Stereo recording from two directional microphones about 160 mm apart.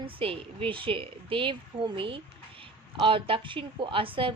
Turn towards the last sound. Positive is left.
turn(degrees=-35)  # may be behind; listen again after turning